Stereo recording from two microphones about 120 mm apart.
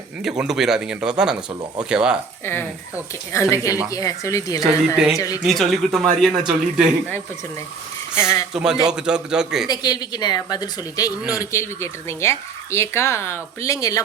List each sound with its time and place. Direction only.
0.2 s a man's voice: 5° right (ahead or behind)
2.4 s speech: 20° left (ahead or behind)
4.9 s a man's voice: 5° right (ahead or behind)
8.1 s speech: 20° left (ahead or behind)
8.5 s a man's voice: 5° right (ahead or behind)
9.6 s speech: 35° left (ahead or behind)